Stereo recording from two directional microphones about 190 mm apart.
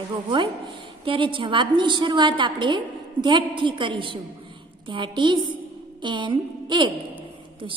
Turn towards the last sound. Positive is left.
turn(degrees=-25)  # may be behind; listen again after turning